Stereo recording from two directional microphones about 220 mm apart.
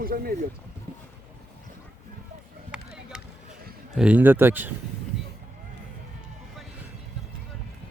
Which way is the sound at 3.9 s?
5° right (ahead or behind).